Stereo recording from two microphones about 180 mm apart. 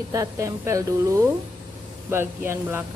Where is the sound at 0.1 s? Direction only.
20° right (ahead or behind).